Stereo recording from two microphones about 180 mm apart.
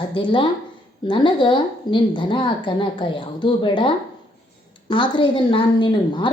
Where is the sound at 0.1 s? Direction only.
30° left (ahead or behind).